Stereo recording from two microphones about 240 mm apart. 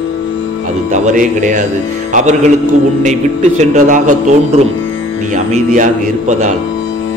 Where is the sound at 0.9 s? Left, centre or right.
Right.